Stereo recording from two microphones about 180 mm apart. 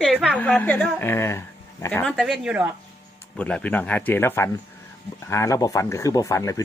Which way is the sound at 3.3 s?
5° left (ahead or behind).